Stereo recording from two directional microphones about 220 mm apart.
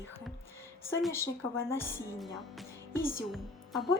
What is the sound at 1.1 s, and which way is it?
Speech, 10° left (ahead or behind).